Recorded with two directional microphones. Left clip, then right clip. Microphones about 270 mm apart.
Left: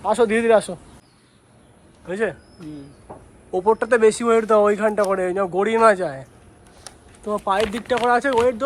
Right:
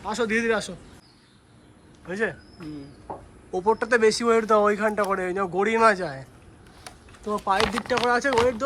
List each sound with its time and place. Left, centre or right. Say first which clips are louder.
0.0 s a man's voice: left 7 dB; centre
2.0 s speech: left 4 dB; centre
3.1 s a sound: right 4 dB; right
3.6 s speech: left 4 dB; centre
7.3 s speech: left 2 dB; centre